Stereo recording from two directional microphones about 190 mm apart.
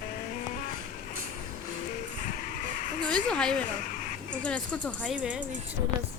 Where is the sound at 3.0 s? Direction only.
5° left (ahead or behind).